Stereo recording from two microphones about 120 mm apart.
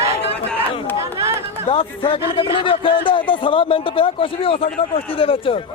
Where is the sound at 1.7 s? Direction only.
50° left (ahead or behind).